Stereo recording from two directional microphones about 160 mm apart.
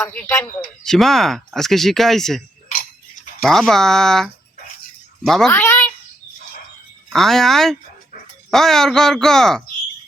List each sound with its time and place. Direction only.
0.1 s speech: 10° left (ahead or behind)
3.4 s speech: centre (ahead or behind)
5.5 s a sound: 15° left (ahead or behind)
7.1 s speech: centre (ahead or behind)